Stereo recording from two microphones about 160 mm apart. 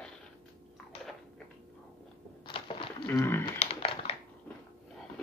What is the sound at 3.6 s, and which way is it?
Typing, 40° left (ahead or behind).